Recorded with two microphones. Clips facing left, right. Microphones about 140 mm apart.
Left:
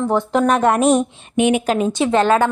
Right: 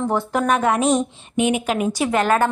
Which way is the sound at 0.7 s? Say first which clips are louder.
Left 4 dB; 50° left (ahead or behind).